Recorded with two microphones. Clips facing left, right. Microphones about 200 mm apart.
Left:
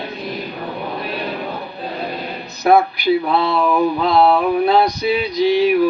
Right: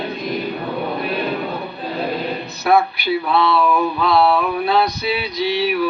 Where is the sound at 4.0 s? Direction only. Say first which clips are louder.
Even; 40° left (ahead or behind).